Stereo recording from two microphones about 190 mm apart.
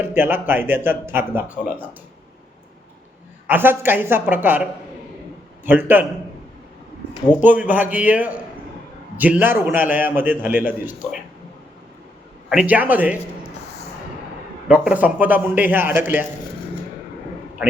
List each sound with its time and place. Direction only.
0.1 s speech: 10° right (ahead or behind)
3.4 s speech: 10° right (ahead or behind)
7.3 s speech: 10° right (ahead or behind)
12.5 s speech: 5° right (ahead or behind)
14.7 s speech: 5° right (ahead or behind)